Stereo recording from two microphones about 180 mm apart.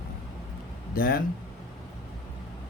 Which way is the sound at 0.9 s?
55° left (ahead or behind).